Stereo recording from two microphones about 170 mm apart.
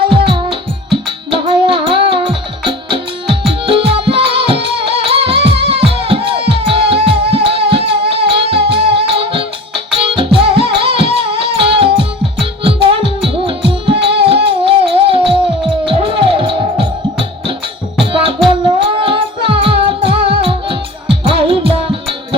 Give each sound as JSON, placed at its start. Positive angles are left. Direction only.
{"t": 0.1, "sound": "music", "side_deg": -30}